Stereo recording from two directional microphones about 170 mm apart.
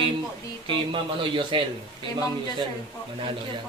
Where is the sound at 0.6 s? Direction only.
30° right (ahead or behind).